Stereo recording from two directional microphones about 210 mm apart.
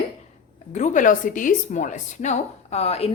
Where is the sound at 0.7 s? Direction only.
35° left (ahead or behind).